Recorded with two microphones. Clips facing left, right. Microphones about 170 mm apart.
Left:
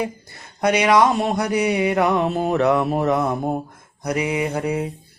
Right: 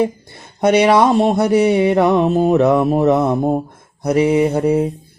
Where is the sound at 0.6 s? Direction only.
30° right (ahead or behind).